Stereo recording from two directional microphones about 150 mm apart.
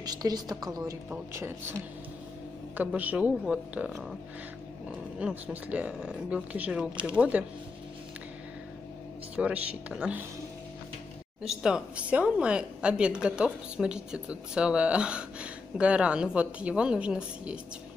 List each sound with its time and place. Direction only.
0.0 s a woman's voice: 25° right (ahead or behind)
2.8 s a woman's voice: 10° right (ahead or behind)
9.3 s a woman's voice: 10° right (ahead or behind)
11.4 s a woman's voice: 5° right (ahead or behind)